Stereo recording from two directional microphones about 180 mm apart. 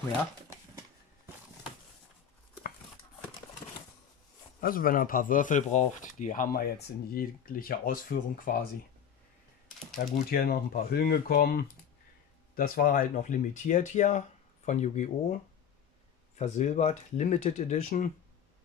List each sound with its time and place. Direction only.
0.5 s a sound: 15° right (ahead or behind)
4.6 s speech: 50° left (ahead or behind)
9.9 s speech: 55° left (ahead or behind)
16.3 s speech: 40° left (ahead or behind)